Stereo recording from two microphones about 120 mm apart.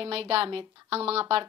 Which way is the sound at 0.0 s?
50° right (ahead or behind).